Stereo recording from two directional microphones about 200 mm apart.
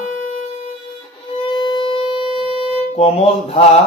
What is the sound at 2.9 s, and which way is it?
Mantra, 30° left (ahead or behind).